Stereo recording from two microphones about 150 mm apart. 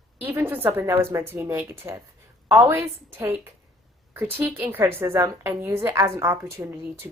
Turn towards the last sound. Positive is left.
turn(degrees=-20)  # may be behind; listen again after turning